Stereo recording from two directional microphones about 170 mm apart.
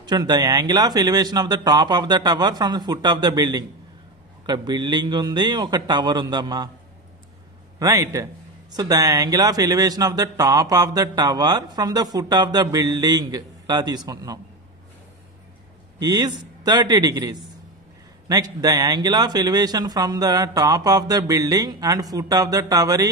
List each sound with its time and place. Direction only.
0.0 s speech: 25° right (ahead or behind)
7.8 s speech: 20° right (ahead or behind)
16.0 s speech: 25° right (ahead or behind)